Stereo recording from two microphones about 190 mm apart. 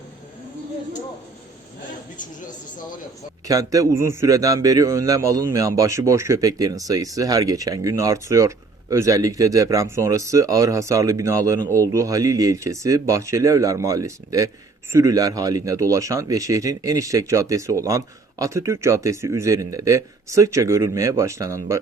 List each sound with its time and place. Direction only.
3.4 s a man's voice: 20° right (ahead or behind)